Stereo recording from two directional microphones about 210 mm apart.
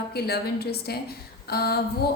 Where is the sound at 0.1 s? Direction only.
50° left (ahead or behind).